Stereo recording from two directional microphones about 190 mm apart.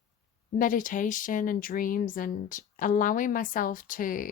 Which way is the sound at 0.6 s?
45° left (ahead or behind).